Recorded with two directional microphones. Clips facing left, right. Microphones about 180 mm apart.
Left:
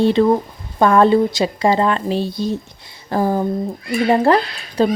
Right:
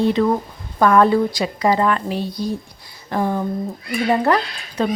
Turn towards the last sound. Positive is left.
turn(degrees=30)  # may be behind; listen again after turning